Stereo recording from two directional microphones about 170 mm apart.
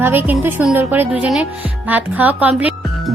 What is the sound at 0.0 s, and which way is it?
Music, 10° right (ahead or behind).